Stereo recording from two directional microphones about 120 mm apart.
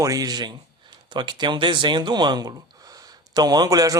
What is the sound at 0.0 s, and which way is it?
A man's voice, 30° right (ahead or behind).